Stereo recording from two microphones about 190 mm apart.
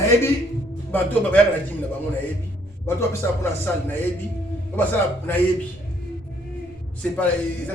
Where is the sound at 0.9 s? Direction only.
10° left (ahead or behind).